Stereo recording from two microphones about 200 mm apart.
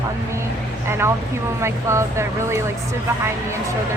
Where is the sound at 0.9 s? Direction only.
10° right (ahead or behind).